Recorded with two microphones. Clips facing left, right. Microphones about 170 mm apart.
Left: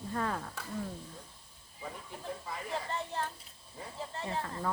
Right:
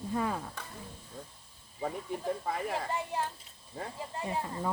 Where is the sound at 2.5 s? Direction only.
55° right (ahead or behind).